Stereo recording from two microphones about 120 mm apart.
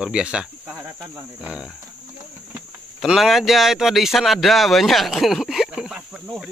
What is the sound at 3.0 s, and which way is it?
Speech, centre (ahead or behind).